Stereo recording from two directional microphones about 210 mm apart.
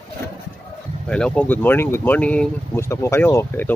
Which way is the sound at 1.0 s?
5° left (ahead or behind).